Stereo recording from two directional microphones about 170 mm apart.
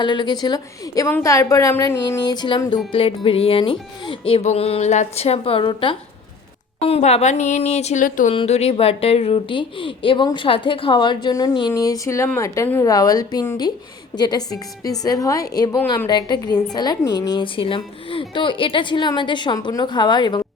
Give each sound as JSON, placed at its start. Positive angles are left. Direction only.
{"t": 0.0, "sound": "a woman's voice", "side_deg": 25}
{"t": 8.3, "sound": "a woman's voice", "side_deg": 35}